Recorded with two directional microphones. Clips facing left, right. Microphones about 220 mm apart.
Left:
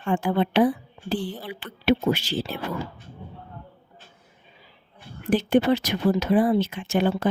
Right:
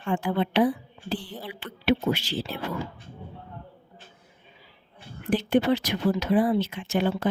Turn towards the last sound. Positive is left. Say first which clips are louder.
# left 3 dB
turn(degrees=45)  # may be behind; listen again after turning